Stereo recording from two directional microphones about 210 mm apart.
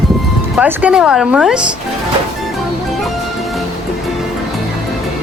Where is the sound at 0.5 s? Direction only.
5° right (ahead or behind).